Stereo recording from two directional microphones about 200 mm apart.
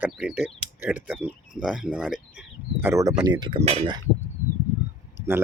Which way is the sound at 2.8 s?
15° right (ahead or behind).